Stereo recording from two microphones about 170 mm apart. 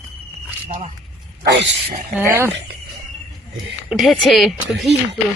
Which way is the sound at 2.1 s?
15° right (ahead or behind).